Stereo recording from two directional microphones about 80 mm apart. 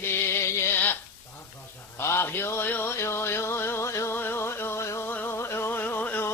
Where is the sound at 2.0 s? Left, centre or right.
Left.